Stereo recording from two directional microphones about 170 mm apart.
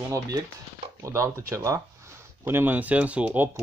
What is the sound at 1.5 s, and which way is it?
Hammer, 20° right (ahead or behind).